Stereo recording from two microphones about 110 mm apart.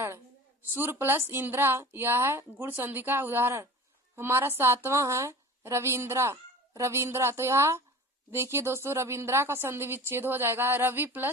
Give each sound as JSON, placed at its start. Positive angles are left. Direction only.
{"t": 0.8, "sound": "a woman's voice", "side_deg": -20}